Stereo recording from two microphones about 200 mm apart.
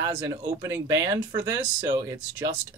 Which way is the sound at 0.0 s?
15° right (ahead or behind).